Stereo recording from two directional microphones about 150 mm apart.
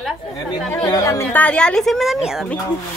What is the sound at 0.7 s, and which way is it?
Speech, 20° left (ahead or behind).